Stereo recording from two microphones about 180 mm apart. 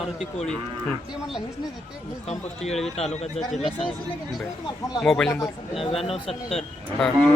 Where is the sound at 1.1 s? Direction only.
5° right (ahead or behind).